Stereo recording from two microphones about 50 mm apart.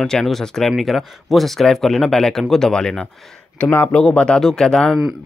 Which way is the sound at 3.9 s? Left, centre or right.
Left.